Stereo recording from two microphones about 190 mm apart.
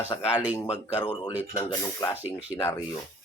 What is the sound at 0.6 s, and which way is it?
Speech, 35° left (ahead or behind).